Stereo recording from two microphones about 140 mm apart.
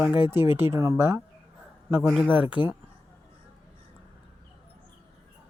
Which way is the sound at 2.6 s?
30° left (ahead or behind).